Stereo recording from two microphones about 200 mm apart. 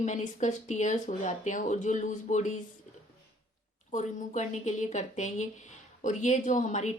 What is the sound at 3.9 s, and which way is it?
A woman's voice, 35° left (ahead or behind).